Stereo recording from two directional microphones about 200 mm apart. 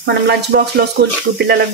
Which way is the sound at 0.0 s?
55° right (ahead or behind).